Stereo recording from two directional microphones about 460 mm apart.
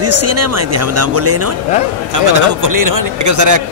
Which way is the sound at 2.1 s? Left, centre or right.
Right.